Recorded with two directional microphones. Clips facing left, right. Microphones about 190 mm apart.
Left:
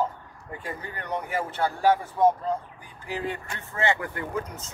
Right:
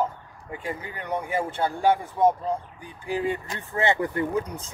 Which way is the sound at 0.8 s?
10° right (ahead or behind).